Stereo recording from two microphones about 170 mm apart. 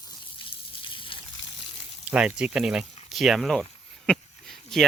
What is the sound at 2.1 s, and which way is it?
Speech, 5° right (ahead or behind).